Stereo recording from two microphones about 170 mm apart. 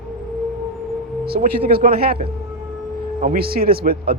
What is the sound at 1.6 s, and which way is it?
Speech, 60° right (ahead or behind).